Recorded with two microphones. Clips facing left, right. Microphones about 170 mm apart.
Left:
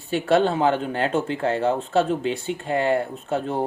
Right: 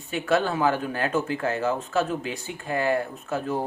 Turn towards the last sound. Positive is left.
turn(degrees=25)  # may be behind; listen again after turning